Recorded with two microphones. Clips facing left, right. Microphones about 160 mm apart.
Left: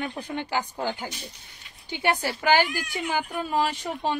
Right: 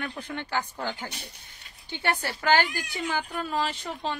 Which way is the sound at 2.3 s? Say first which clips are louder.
Even; 15° left (ahead or behind).